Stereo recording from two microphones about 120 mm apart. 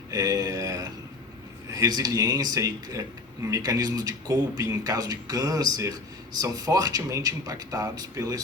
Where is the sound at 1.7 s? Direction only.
30° right (ahead or behind).